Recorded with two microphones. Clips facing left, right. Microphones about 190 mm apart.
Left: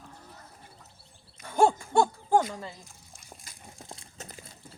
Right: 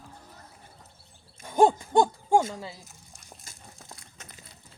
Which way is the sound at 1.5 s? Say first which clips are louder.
Right 2 dB; 15° right (ahead or behind).